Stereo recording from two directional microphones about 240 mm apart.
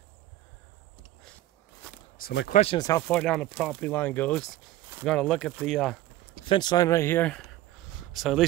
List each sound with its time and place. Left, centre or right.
2.1 s speech: left
2.5 s speech: left
2.8 s speech: centre
6.4 s speech: centre